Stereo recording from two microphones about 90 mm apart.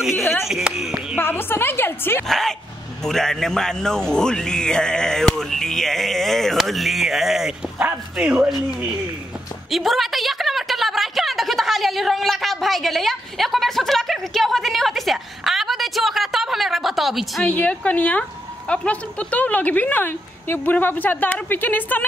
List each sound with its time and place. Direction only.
0.1 s a woman's voice: 25° left (ahead or behind)
0.5 s a man's voice: 5° right (ahead or behind)
1.1 s a woman's voice: 20° left (ahead or behind)
2.2 s a man's voice: 5° left (ahead or behind); by 8.4 s 15° right (ahead or behind)
9.7 s a woman's voice: centre (ahead or behind)
17.5 s a woman's voice: 15° left (ahead or behind)